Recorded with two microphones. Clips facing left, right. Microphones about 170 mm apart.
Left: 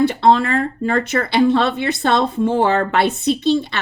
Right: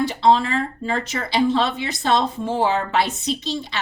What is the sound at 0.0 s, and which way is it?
Speech, 60° left (ahead or behind).